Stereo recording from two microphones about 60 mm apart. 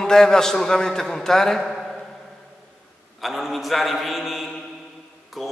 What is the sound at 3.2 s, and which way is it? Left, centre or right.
A man's voice, centre.